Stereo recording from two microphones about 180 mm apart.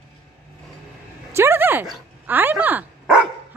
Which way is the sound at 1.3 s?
15° right (ahead or behind).